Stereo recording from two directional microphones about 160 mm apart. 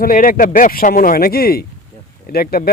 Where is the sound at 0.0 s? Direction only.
65° left (ahead or behind).